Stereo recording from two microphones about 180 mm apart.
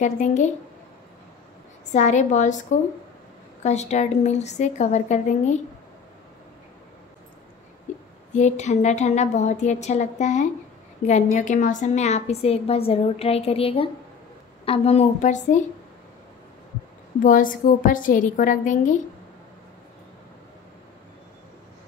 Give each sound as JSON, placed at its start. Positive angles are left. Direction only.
{"t": 0.0, "sound": "a woman's voice", "side_deg": 40}
{"t": 1.9, "sound": "a woman's voice", "side_deg": 40}
{"t": 3.6, "sound": "a woman's voice", "side_deg": 40}
{"t": 8.3, "sound": "a woman's voice", "side_deg": 40}
{"t": 17.2, "sound": "a woman's voice", "side_deg": 50}